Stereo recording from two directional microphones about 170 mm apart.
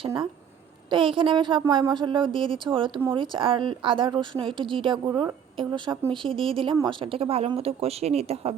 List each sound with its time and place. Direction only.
0.9 s a woman's voice: 30° right (ahead or behind)